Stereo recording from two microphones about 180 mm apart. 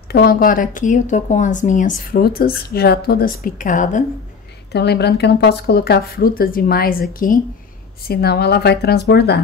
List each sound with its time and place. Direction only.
0.1 s speech: 55° left (ahead or behind)
4.7 s speech: 65° left (ahead or behind)